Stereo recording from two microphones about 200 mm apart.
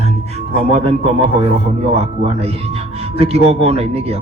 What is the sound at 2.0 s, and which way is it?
A man's voice, 30° right (ahead or behind).